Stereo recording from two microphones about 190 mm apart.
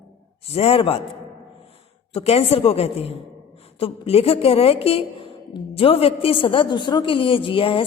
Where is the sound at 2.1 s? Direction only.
30° left (ahead or behind).